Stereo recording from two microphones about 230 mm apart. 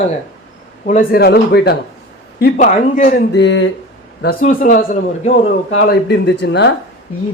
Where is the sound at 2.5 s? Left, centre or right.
Left.